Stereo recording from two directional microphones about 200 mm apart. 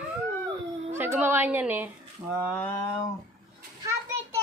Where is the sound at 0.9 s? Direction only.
10° right (ahead or behind).